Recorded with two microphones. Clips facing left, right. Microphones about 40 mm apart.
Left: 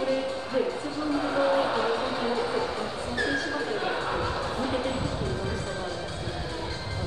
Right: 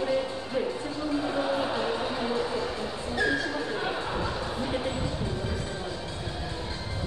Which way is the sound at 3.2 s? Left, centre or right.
Centre.